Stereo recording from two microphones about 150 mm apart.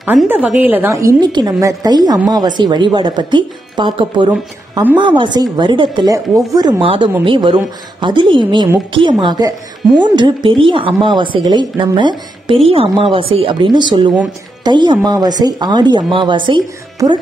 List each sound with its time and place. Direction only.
0.0 s speech: 10° right (ahead or behind)
6.8 s speech: 35° right (ahead or behind)